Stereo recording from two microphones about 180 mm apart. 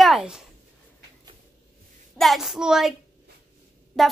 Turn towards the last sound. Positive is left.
turn(degrees=0)  # may be behind; listen again after turning